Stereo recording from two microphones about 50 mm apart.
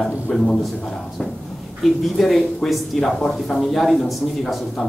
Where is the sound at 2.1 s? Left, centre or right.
Centre.